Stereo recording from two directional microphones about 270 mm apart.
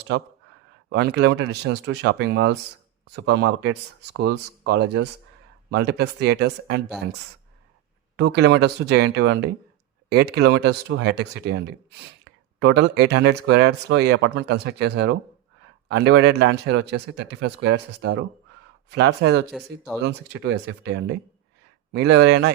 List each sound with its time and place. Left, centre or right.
0.9 s speech: right
8.1 s speech: right
19.5 s speech: centre
20.0 s speech: right